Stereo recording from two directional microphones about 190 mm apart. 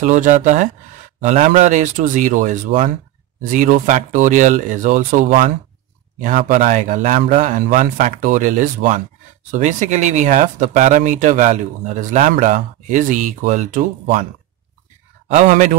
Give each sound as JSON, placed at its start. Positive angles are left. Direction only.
{"t": 0.0, "sound": "speech", "side_deg": -40}
{"t": 15.2, "sound": "speech", "side_deg": -40}